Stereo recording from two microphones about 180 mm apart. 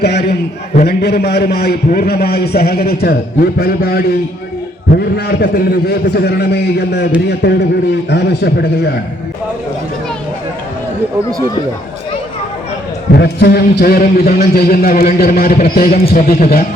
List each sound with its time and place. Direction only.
0.0 s a man's voice: 65° left (ahead or behind)
13.1 s a man's voice: 65° left (ahead or behind)